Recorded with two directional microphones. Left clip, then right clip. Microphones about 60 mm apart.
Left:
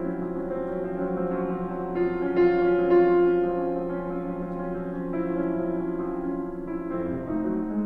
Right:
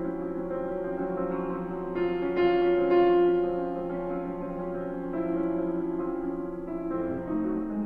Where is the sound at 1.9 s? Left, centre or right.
Left.